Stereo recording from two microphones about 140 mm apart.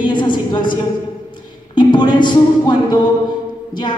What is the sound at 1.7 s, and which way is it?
A woman's voice, 35° left (ahead or behind).